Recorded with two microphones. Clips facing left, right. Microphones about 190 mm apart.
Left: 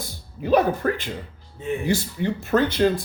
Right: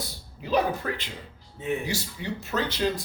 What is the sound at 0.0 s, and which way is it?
Speech, 50° left (ahead or behind).